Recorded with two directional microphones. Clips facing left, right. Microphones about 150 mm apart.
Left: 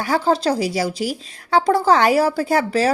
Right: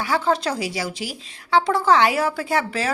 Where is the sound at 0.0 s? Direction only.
40° left (ahead or behind).